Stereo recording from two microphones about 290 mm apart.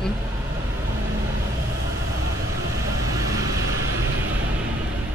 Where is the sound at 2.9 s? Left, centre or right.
Right.